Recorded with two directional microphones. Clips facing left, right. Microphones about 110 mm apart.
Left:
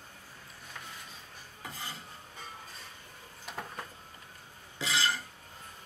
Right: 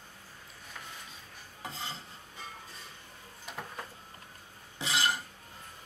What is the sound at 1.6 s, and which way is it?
Stir, 20° right (ahead or behind).